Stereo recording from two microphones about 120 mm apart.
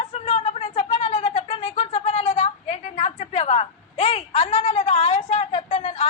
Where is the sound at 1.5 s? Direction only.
50° left (ahead or behind).